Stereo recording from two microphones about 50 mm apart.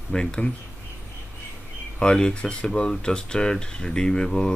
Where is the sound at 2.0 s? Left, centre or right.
Centre.